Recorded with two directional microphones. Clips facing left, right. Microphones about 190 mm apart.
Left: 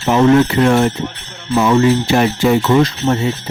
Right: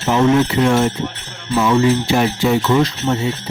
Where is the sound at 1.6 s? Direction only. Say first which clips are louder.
Left 2 dB; 50° left (ahead or behind).